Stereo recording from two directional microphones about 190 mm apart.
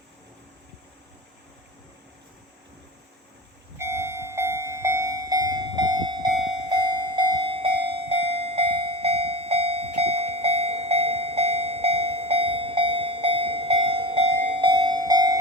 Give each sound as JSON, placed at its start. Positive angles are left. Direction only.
{"t": 3.8, "sound": "train", "side_deg": -15}
{"t": 6.7, "sound": "cowbell", "side_deg": -25}